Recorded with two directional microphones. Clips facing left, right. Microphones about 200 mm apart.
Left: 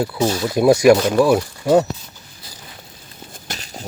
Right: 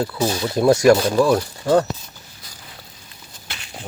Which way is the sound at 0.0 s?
10° left (ahead or behind).